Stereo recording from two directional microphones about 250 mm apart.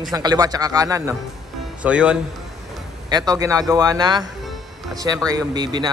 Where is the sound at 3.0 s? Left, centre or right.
Centre.